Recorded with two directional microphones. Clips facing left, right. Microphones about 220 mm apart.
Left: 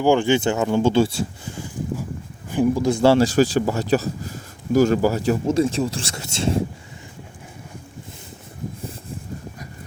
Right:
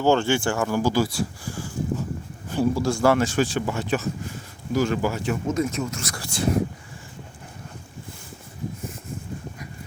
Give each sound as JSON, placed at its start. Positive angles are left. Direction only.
{"t": 0.0, "sound": "speech", "side_deg": 15}